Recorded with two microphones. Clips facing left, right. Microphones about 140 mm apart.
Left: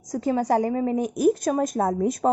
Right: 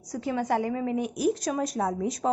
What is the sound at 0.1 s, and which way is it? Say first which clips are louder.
A woman's voice: left 5 dB; 40° left (ahead or behind).